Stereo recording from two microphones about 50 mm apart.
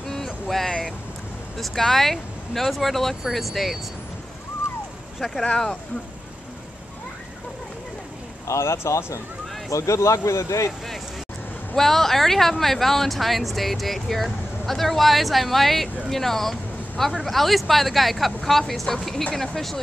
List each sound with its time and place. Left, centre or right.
0.1 s vehicle: centre
1.6 s speech: centre
8.5 s speech: left
11.7 s speech: centre